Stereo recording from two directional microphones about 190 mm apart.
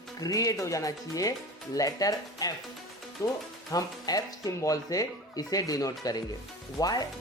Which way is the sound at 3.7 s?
20° left (ahead or behind).